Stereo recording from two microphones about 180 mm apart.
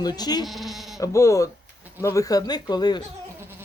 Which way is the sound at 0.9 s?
15° left (ahead or behind).